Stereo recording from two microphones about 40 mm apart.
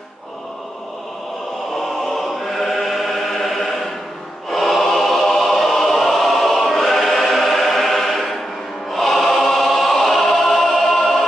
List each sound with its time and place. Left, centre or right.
1.8 s choir: centre